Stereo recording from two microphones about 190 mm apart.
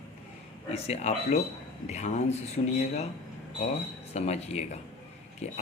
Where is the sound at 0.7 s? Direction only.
35° left (ahead or behind).